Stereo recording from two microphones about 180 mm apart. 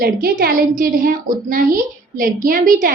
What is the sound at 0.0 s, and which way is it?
A woman's voice, 55° right (ahead or behind).